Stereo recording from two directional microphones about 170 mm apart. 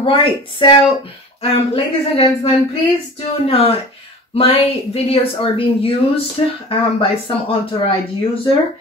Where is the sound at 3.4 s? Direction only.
35° left (ahead or behind).